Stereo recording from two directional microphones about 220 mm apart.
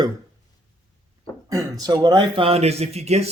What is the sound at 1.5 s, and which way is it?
Speech, 15° right (ahead or behind).